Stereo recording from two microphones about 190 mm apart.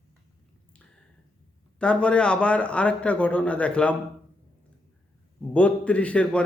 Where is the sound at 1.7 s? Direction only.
5° left (ahead or behind).